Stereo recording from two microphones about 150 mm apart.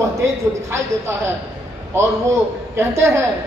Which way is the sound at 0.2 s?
15° right (ahead or behind).